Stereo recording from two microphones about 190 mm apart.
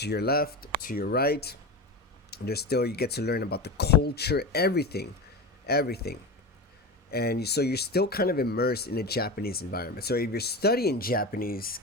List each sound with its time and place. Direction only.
0.0 s speech: 60° left (ahead or behind)